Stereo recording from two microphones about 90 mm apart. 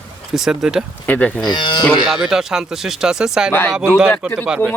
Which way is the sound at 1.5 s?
60° left (ahead or behind).